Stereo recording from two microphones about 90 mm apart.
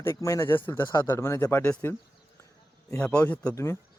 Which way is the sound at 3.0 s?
15° left (ahead or behind).